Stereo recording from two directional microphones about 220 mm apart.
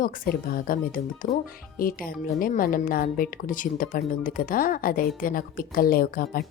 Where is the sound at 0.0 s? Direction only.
40° left (ahead or behind).